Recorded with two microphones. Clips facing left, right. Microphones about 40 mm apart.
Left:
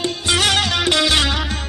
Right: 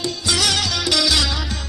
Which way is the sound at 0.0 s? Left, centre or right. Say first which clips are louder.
Left 3 dB; left.